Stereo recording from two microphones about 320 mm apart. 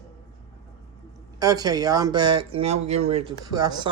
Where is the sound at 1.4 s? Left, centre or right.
Centre.